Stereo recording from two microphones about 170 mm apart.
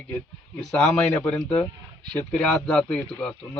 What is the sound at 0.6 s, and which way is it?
A man's voice, 5° left (ahead or behind).